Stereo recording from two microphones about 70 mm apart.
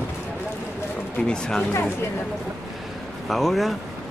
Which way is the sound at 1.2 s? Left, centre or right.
Centre.